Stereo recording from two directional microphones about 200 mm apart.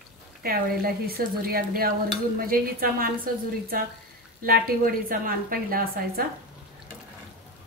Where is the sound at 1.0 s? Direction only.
50° right (ahead or behind).